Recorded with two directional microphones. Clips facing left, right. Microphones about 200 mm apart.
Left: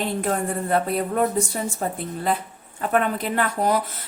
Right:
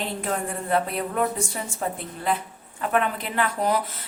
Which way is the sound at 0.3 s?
40° left (ahead or behind).